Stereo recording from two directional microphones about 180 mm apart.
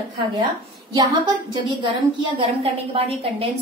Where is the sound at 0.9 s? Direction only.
25° right (ahead or behind).